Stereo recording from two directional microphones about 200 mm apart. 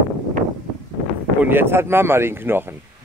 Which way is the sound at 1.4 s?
10° right (ahead or behind).